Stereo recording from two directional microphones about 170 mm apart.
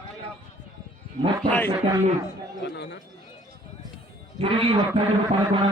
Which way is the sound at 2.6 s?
90° left.